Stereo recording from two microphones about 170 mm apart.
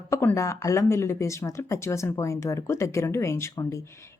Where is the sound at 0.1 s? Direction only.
15° left (ahead or behind).